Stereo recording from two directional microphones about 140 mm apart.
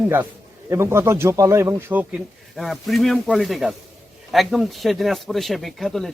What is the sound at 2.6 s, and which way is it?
Speech, centre (ahead or behind).